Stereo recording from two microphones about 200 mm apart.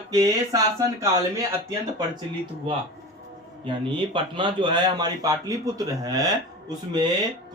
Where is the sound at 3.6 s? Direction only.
25° right (ahead or behind).